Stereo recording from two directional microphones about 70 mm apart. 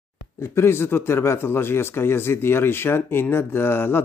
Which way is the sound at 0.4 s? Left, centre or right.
Left.